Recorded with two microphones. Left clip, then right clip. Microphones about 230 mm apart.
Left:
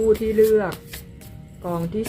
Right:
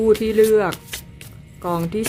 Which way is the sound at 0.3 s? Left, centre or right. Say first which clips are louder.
Right 2 dB; right.